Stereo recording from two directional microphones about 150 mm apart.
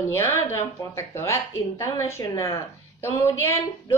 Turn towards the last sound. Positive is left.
turn(degrees=20)  # may be behind; listen again after turning